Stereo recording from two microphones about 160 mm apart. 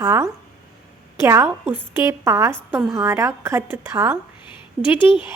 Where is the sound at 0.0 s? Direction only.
15° right (ahead or behind).